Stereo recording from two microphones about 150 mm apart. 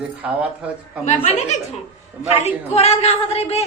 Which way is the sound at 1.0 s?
50° left (ahead or behind).